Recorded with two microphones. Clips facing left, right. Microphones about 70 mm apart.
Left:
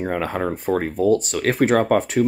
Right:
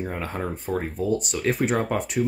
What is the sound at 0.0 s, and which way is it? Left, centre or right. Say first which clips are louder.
Speech: left 6 dB; left.